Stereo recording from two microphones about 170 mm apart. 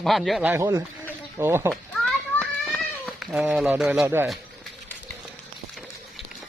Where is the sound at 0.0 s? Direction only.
Centre (ahead or behind).